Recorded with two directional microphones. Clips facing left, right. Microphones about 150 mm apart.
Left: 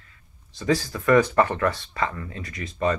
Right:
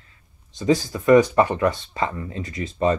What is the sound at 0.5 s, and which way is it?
Speech, 20° right (ahead or behind).